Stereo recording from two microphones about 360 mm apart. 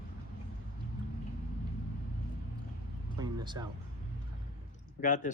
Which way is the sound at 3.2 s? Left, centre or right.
Centre.